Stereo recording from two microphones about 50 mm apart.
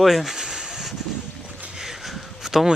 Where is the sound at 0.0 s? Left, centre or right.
Centre.